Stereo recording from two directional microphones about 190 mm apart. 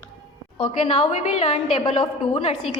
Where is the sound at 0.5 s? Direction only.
30° left (ahead or behind).